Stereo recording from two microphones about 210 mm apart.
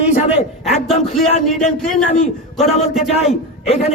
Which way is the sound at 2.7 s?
30° left (ahead or behind).